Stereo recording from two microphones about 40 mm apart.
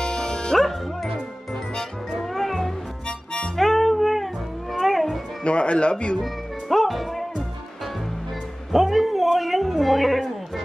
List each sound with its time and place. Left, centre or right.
0.0 s music: centre
0.6 s music: centre
3.1 s harmonica: left
3.5 s music: centre
5.4 s music: left
6.1 s music: centre
8.7 s a sound: centre